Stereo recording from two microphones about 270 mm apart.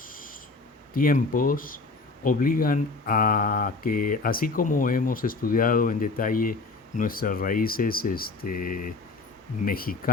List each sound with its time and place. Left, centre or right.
0.9 s speech: left